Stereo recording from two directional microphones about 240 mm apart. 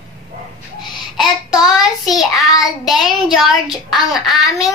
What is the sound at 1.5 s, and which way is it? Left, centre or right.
Child singing, centre.